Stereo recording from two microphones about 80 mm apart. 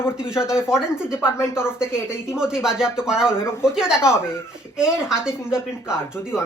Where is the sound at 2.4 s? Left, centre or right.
Centre.